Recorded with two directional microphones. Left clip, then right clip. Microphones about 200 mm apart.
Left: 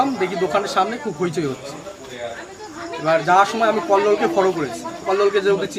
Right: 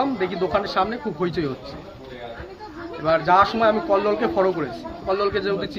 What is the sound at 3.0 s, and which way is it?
A man's voice, 10° left (ahead or behind).